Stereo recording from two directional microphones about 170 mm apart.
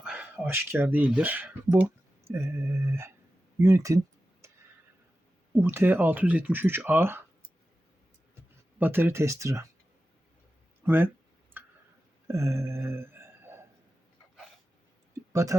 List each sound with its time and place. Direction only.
0.0 s speech: 5° right (ahead or behind)
3.6 s a sound: 15° right (ahead or behind)
5.5 s speech: 15° right (ahead or behind)
8.8 s speech: 10° right (ahead or behind)
10.8 s speech: 10° right (ahead or behind)
12.3 s a sound: 15° right (ahead or behind)
15.3 s speech: 20° right (ahead or behind)